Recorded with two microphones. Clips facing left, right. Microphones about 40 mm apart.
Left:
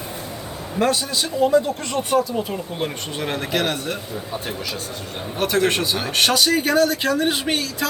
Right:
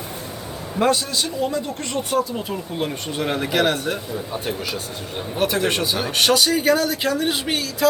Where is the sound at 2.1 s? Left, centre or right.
Centre.